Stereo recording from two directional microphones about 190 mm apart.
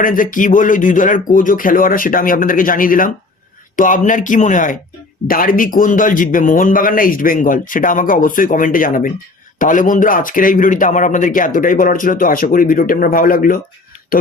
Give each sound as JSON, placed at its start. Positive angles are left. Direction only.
{"t": 0.0, "sound": "a man's voice", "side_deg": 45}